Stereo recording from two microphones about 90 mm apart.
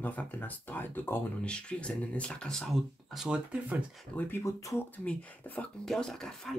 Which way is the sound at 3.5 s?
15° right (ahead or behind).